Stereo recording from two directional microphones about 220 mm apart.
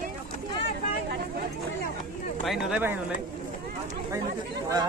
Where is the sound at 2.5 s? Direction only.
5° right (ahead or behind).